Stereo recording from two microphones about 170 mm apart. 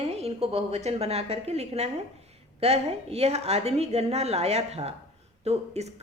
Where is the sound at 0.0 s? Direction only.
35° right (ahead or behind).